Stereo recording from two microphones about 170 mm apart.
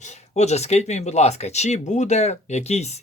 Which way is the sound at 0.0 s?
40° left (ahead or behind).